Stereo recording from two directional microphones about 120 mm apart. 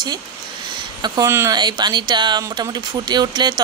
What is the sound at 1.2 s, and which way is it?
Speech, 25° right (ahead or behind).